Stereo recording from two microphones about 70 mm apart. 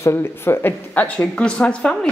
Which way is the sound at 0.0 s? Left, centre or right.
Left.